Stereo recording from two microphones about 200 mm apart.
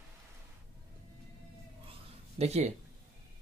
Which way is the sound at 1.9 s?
30° right (ahead or behind).